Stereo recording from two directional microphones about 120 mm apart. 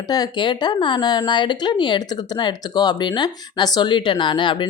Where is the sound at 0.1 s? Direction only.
35° left (ahead or behind).